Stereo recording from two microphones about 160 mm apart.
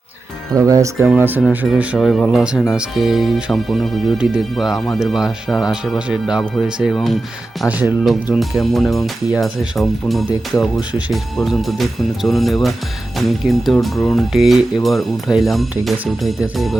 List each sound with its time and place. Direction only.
0.5 s speech: 20° right (ahead or behind)
1.4 s speech: centre (ahead or behind)